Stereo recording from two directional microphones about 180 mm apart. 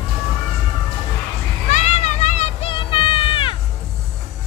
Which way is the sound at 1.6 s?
40° left (ahead or behind).